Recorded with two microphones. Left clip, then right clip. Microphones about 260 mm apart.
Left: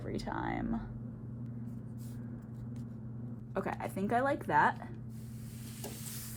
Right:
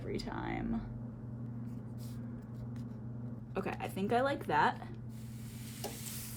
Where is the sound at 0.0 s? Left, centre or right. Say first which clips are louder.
Left 2 dB; centre.